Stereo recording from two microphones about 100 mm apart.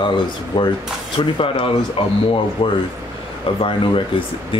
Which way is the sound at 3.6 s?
60° left (ahead or behind).